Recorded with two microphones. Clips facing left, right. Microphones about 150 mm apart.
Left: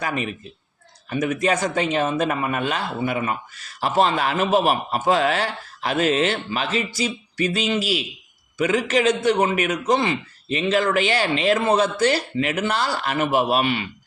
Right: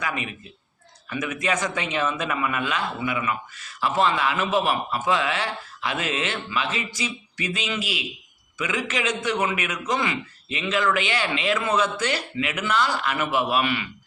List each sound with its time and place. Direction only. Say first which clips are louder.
0.0 s a man's voice: left 4 dB; 40° left (ahead or behind)